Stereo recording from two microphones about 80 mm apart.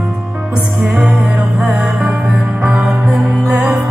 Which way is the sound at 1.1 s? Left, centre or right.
Centre.